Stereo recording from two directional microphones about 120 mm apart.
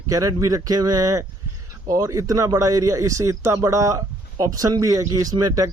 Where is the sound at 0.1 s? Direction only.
30° right (ahead or behind).